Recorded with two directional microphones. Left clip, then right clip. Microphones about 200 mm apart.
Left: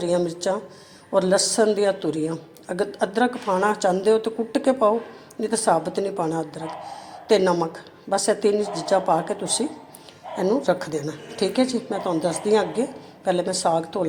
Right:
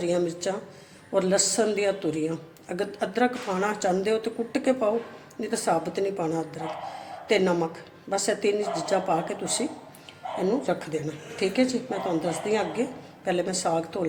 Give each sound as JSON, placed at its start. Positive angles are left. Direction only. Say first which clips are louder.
{"t": 0.0, "sound": "a woman's voice", "louder": "left 4 dB", "side_deg": 10}
{"t": 10.7, "sound": "a woman's voice", "louder": "left 5 dB", "side_deg": 20}